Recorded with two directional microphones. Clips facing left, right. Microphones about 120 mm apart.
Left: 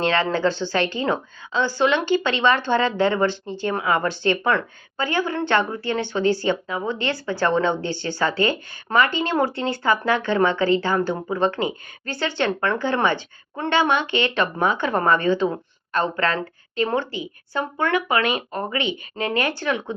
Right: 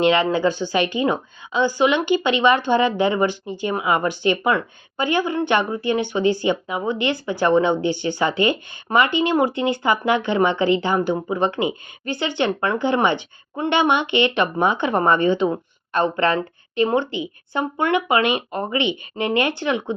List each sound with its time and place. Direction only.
0.0 s a woman's voice: 15° right (ahead or behind)